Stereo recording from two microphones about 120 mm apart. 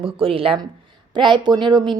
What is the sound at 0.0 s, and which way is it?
A woman's voice, 50° right (ahead or behind).